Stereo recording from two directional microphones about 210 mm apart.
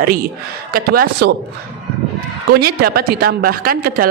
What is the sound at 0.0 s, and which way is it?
A woman's voice, 45° right (ahead or behind).